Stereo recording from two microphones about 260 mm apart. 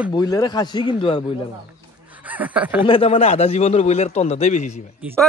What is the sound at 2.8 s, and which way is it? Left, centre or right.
Speech, left.